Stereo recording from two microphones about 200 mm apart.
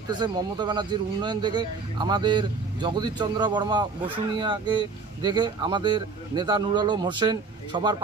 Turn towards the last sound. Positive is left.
turn(degrees=-20)  # may be behind; listen again after turning